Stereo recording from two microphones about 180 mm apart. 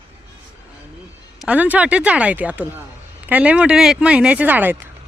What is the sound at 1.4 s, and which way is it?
Speech, 5° right (ahead or behind).